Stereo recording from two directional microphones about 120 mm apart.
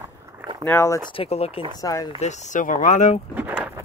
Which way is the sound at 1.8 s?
30° left (ahead or behind).